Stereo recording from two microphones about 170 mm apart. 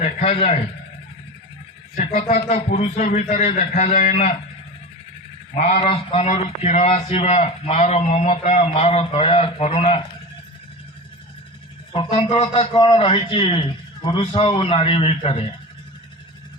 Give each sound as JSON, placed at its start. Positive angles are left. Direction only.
{"t": 0.0, "sound": "a man's voice", "side_deg": 35}
{"t": 2.0, "sound": "a man's voice", "side_deg": 40}
{"t": 5.6, "sound": "a man's voice", "side_deg": 35}
{"t": 11.9, "sound": "a man's voice", "side_deg": 35}